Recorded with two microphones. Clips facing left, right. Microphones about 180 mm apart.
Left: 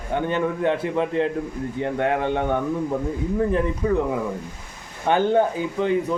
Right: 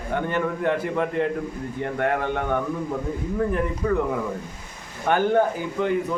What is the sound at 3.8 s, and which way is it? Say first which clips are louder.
Speech: left 1 dB; 20° left (ahead or behind).